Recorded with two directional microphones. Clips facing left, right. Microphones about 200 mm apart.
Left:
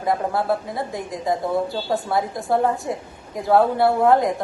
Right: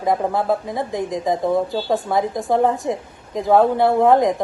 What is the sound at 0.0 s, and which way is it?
Speech, 20° right (ahead or behind).